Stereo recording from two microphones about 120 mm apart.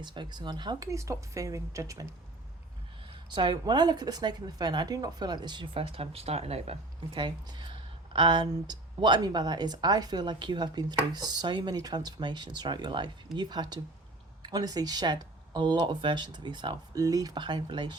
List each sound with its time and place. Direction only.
0.0 s speech: 40° right (ahead or behind)
3.2 s speech: 40° right (ahead or behind); by 6.7 s 60° right (ahead or behind)
7.1 s speech: 40° right (ahead or behind)